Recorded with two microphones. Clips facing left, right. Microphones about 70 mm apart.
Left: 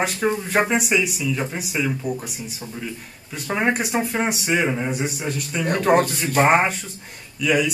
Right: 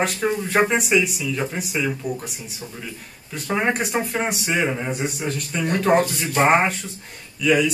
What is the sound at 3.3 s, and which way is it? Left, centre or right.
Speech, centre.